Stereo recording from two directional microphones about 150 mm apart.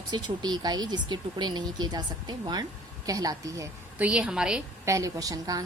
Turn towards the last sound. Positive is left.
turn(degrees=-25)  # may be behind; listen again after turning